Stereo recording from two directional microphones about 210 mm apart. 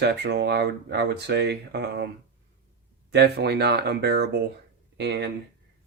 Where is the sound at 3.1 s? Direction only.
50° right (ahead or behind).